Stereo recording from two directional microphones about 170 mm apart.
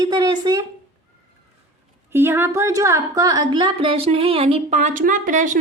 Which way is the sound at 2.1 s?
15° right (ahead or behind).